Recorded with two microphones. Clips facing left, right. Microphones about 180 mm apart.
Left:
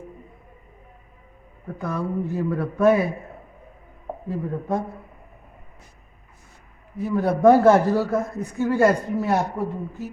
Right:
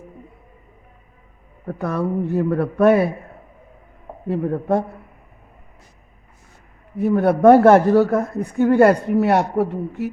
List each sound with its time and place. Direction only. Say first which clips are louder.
1.6 s a man's voice: right 5 dB; 65° right (ahead or behind)
4.3 s speech: right 6 dB; 65° right (ahead or behind)
6.9 s a man's voice: right 6 dB; 60° right (ahead or behind)